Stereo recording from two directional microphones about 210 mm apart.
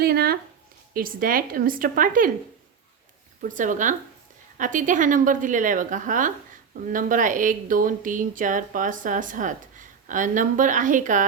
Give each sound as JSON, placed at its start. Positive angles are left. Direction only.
{"t": 0.0, "sound": "speech", "side_deg": -45}
{"t": 3.4, "sound": "speech", "side_deg": -40}